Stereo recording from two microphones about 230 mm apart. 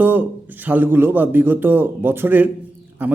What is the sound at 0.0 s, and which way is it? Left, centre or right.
A man's voice, centre.